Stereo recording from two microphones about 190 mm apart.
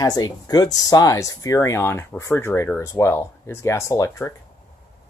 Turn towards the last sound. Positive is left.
turn(degrees=15)  # may be behind; listen again after turning